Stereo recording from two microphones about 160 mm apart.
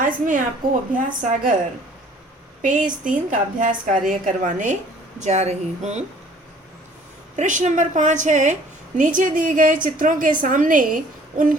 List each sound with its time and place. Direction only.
0.0 s a sound: 55° right (ahead or behind)
0.9 s a woman's voice: 55° right (ahead or behind)
2.6 s a woman's voice: 55° right (ahead or behind)
7.3 s a woman's voice: 50° right (ahead or behind)